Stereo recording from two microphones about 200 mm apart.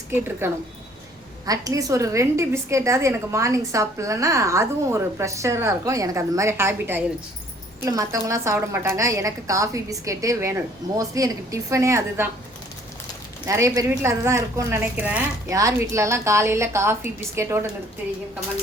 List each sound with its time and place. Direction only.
0.1 s a woman's voice: 10° right (ahead or behind)
13.5 s a woman's voice: 15° right (ahead or behind)